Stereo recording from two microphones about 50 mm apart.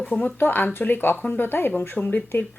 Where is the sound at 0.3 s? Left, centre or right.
Left.